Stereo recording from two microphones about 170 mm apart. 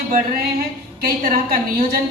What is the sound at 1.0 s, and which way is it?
Speech, 65° right (ahead or behind).